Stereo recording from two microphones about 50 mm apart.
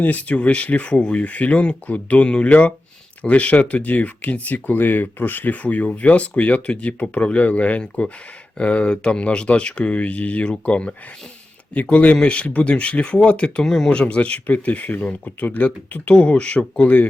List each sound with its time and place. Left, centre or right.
0.0 s speech: left
13.7 s speech: centre; by 16.1 s left
16.1 s speech: left